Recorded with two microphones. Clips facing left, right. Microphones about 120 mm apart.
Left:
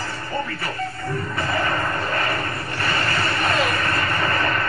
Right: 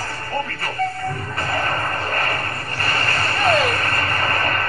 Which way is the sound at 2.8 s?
50° right (ahead or behind).